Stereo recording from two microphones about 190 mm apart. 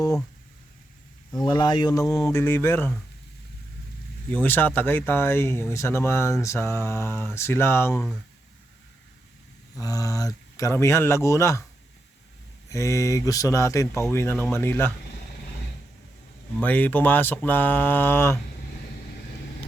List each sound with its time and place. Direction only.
1.5 s speech: 20° left (ahead or behind)
4.3 s speech: 10° left (ahead or behind)
9.7 s speech: 20° left (ahead or behind)
12.7 s speech: 15° left (ahead or behind)
16.6 s speech: 10° left (ahead or behind)